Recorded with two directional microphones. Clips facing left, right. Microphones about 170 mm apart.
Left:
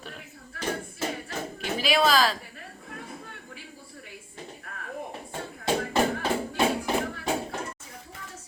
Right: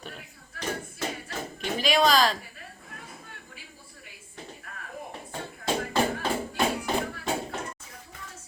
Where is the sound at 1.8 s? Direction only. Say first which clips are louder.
Even; 5° left (ahead or behind).